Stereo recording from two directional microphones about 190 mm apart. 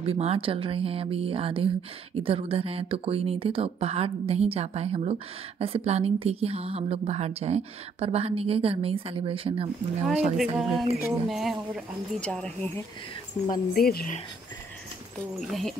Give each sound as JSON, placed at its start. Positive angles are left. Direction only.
{"t": 0.0, "sound": "speech", "side_deg": -30}
{"t": 10.3, "sound": "a woman's voice", "side_deg": 0}
{"t": 13.5, "sound": "speech", "side_deg": 50}
{"t": 15.3, "sound": "a woman's voice", "side_deg": 0}